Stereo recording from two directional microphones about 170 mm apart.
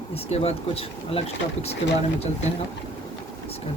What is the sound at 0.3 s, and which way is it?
Speech, 40° left (ahead or behind).